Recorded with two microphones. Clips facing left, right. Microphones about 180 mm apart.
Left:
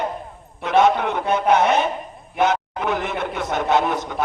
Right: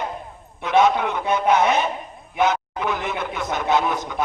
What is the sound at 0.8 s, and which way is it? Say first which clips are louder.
A man's voice: left 1 dB; 65° left (ahead or behind).